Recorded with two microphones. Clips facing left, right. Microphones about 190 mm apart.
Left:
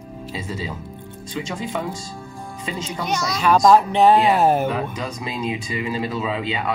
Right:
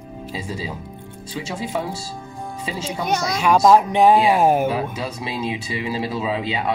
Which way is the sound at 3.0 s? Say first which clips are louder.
Right 2 dB; 55° right (ahead or behind).